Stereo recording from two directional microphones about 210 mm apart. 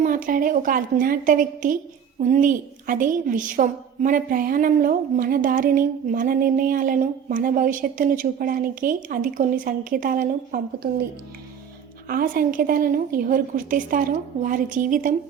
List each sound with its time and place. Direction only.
0.0 s a woman's voice: 40° right (ahead or behind)
12.0 s a woman's voice: 45° right (ahead or behind)